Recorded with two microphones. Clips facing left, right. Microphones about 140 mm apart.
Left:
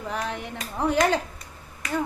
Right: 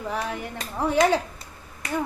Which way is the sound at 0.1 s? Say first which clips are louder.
Right 1 dB; 5° right (ahead or behind).